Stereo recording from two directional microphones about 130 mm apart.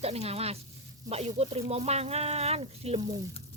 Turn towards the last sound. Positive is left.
turn(degrees=-55)  # may be behind; listen again after turning